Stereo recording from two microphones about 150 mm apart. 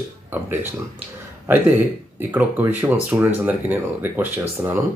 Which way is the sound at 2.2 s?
10° right (ahead or behind).